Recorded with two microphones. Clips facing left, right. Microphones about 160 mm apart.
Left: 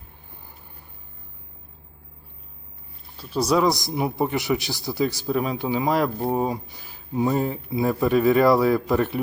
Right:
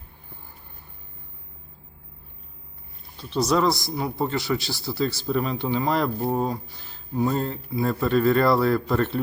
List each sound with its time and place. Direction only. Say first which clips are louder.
3.2 s speech: left 1 dB; 5° left (ahead or behind)